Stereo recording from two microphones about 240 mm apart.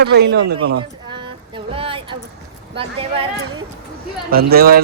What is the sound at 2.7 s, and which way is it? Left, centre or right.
Speech, right.